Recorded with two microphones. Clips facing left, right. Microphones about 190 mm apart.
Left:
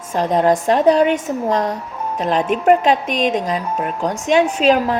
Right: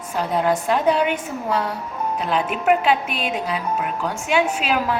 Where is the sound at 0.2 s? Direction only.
40° left (ahead or behind).